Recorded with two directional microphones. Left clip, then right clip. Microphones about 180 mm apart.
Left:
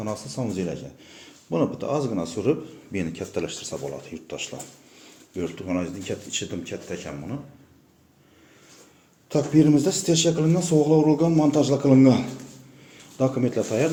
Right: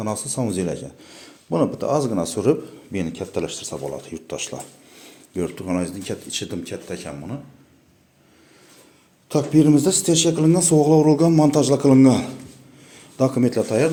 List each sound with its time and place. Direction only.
0.0 s speech: 35° right (ahead or behind)
2.9 s speech: 25° right (ahead or behind)
9.3 s speech: 30° right (ahead or behind)